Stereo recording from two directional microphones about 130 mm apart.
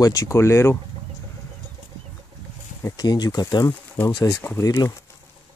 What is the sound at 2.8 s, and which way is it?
Speech, 30° left (ahead or behind).